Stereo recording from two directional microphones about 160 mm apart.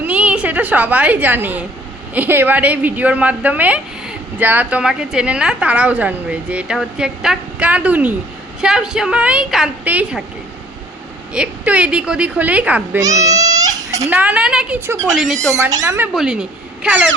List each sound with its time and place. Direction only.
0.0 s a woman's voice: 10° right (ahead or behind)
11.3 s a woman's voice: 10° right (ahead or behind)
13.0 s goat: 20° right (ahead or behind)
14.1 s a woman's voice: 10° right (ahead or behind)
15.4 s speech: 20° right (ahead or behind)
16.1 s speech: 5° right (ahead or behind)